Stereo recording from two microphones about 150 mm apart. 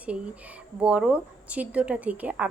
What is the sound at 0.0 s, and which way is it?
Speech, 10° right (ahead or behind).